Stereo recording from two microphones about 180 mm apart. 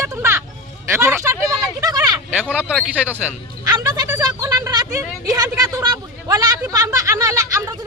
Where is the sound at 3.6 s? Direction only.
20° right (ahead or behind).